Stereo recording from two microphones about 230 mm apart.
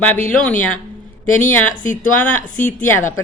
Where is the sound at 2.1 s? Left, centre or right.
Centre.